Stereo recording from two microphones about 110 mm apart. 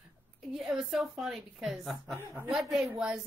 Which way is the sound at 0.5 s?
Centre (ahead or behind).